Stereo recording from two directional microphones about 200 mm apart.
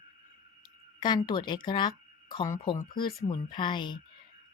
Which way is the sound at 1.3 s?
25° left (ahead or behind).